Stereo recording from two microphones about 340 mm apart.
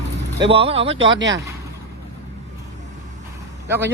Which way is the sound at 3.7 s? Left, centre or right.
Centre.